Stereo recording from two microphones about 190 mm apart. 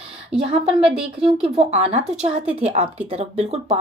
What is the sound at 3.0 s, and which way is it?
Speech, 35° right (ahead or behind).